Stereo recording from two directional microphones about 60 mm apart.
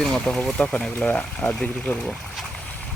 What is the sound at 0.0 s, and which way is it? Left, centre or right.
Speech, centre.